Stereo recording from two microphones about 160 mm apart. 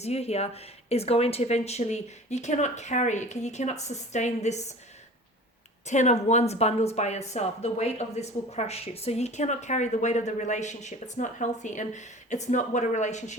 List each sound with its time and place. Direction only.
0.0 s speech: 40° left (ahead or behind)
5.8 s speech: 45° left (ahead or behind)